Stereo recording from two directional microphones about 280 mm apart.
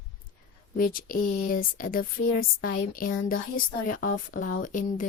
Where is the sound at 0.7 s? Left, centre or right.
Left.